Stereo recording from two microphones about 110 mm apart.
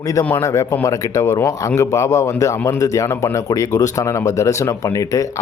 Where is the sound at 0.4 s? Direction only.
25° left (ahead or behind).